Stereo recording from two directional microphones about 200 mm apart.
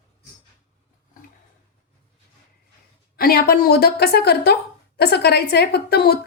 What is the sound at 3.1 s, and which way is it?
A woman's voice, 50° left (ahead or behind).